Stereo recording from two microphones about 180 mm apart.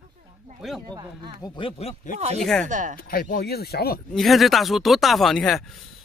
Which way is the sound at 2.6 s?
45° right (ahead or behind).